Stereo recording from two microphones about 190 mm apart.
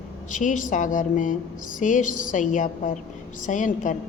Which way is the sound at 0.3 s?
40° left (ahead or behind).